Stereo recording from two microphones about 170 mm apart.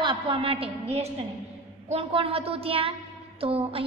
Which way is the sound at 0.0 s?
30° right (ahead or behind).